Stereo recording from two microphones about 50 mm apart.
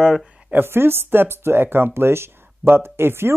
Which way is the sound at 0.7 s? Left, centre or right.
Right.